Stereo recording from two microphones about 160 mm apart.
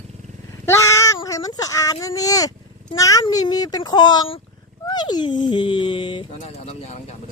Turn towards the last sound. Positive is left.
turn(degrees=30)  # may be behind; listen again after turning